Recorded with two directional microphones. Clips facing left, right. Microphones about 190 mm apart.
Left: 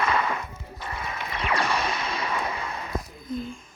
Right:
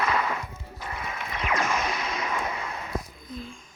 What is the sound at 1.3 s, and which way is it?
Music, 30° left (ahead or behind).